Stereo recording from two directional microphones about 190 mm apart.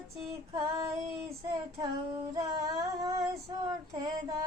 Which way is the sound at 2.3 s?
20° right (ahead or behind).